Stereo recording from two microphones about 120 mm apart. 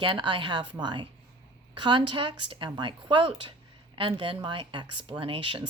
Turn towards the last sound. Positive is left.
turn(degrees=-45)  # may be behind; listen again after turning